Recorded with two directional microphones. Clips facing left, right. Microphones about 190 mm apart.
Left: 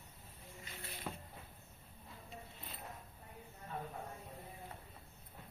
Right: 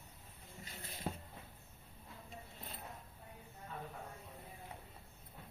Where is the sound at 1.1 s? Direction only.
30° right (ahead or behind).